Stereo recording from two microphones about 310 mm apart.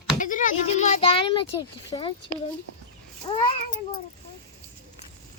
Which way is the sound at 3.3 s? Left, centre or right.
Centre.